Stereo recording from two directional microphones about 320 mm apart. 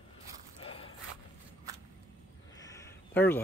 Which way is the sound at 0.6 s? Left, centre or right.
Centre.